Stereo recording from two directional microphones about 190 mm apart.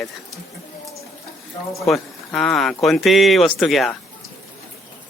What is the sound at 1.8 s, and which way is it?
Speech, centre (ahead or behind).